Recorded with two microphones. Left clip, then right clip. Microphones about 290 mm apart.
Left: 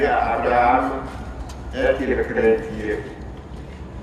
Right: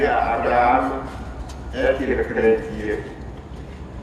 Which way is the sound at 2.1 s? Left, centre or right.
Left.